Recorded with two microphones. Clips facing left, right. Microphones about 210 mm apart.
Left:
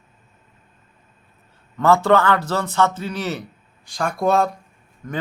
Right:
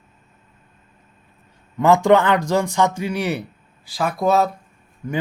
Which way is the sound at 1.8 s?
15° right (ahead or behind).